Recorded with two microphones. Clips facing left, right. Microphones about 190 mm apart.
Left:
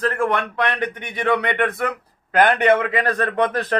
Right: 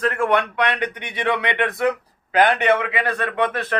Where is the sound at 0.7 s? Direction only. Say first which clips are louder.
Left 1 dB; 45° left (ahead or behind).